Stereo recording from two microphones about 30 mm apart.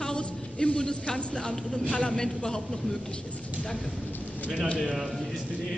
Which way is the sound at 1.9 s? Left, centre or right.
Left.